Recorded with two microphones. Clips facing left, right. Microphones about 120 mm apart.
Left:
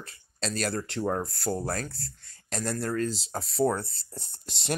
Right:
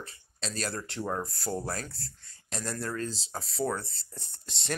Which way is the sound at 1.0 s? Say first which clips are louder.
Left 4 dB; 35° left (ahead or behind).